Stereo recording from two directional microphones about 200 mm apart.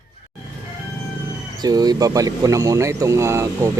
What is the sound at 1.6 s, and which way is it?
Speech, 20° right (ahead or behind).